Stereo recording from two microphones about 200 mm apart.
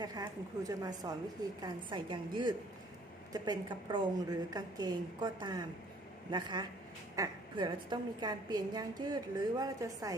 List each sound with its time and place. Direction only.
0.0 s a woman's voice: 20° right (ahead or behind)